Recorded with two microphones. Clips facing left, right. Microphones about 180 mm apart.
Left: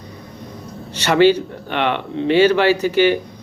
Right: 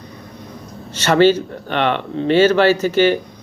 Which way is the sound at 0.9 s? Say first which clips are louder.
Even; 15° left (ahead or behind).